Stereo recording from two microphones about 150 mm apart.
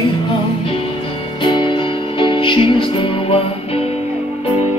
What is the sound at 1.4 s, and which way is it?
Music, 30° left (ahead or behind).